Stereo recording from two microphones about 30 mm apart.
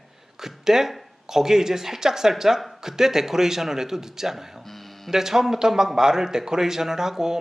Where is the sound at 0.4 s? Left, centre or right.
Centre.